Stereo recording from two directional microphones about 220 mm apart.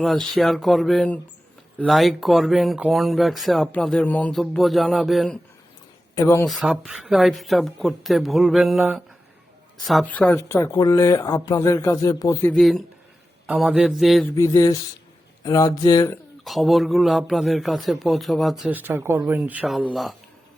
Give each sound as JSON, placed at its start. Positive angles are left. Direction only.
{"t": 0.0, "sound": "speech", "side_deg": 0}
{"t": 6.1, "sound": "speech", "side_deg": 15}
{"t": 6.4, "sound": "speech", "side_deg": 0}
{"t": 14.3, "sound": "speech", "side_deg": 15}
{"t": 16.4, "sound": "speech", "side_deg": 0}